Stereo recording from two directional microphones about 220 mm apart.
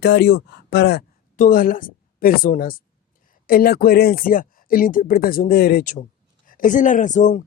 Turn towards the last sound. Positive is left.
turn(degrees=35)  # may be behind; listen again after turning